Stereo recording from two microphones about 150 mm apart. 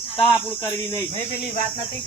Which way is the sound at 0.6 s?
15° left (ahead or behind).